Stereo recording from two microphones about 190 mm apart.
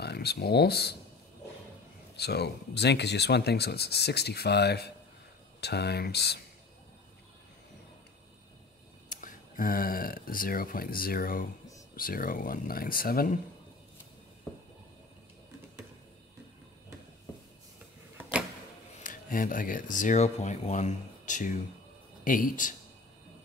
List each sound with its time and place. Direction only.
0.0 s speech: 55° left (ahead or behind)
2.1 s speech: 60° left (ahead or behind)
9.1 s speech: 45° left (ahead or behind)
19.0 s speech: 45° left (ahead or behind)